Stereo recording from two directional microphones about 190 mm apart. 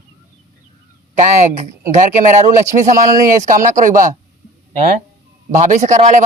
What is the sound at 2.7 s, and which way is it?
Speech, 35° right (ahead or behind).